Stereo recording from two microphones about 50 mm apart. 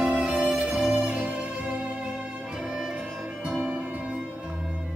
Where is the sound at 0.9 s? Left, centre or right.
Centre.